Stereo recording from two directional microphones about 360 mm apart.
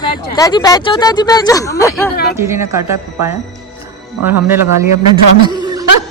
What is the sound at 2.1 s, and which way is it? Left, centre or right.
Speech, left.